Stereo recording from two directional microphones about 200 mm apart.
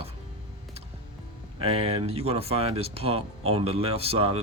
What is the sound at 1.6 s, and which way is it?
Speech, 30° right (ahead or behind).